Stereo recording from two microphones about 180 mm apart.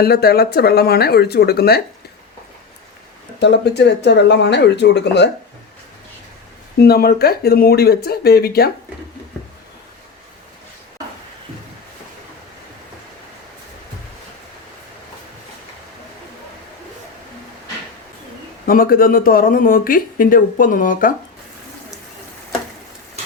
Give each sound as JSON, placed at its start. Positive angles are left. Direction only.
{"t": 0.0, "sound": "speech", "side_deg": 60}
{"t": 3.4, "sound": "speech", "side_deg": 70}
{"t": 6.7, "sound": "speech", "side_deg": 60}
{"t": 18.6, "sound": "speech", "side_deg": 50}